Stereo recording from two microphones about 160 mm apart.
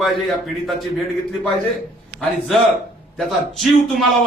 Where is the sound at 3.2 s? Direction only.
Centre (ahead or behind).